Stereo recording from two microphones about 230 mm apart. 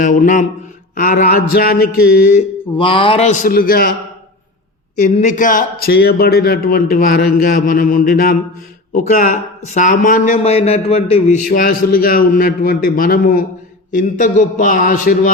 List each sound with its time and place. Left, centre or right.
0.0 s speech: left
2.7 s a man's voice: left
3.5 s speech: left
4.9 s speech: left